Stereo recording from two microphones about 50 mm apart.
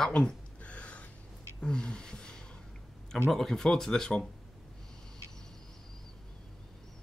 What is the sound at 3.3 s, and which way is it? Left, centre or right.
Speech, centre.